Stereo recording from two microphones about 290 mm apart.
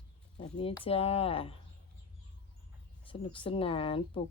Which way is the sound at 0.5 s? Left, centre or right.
Centre.